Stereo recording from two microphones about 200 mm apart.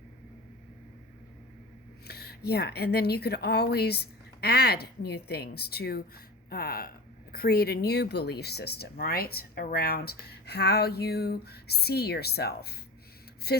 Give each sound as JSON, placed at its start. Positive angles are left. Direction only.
{"t": 2.0, "sound": "speech", "side_deg": 55}